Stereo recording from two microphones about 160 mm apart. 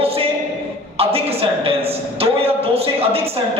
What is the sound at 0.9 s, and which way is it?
A woman's voice, 35° right (ahead or behind).